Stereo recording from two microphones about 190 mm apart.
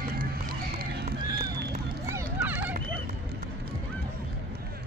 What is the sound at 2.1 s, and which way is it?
Clip-clop, 10° right (ahead or behind).